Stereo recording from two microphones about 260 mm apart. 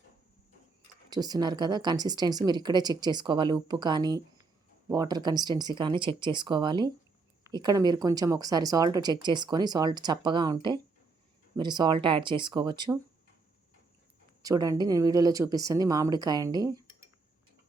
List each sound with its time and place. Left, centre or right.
1.1 s a woman's voice: centre
14.4 s a woman's voice: centre